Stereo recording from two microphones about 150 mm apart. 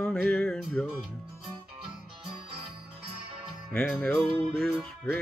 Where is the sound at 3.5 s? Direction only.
Centre (ahead or behind).